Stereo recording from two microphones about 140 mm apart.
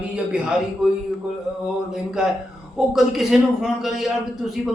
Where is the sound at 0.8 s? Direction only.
5° right (ahead or behind).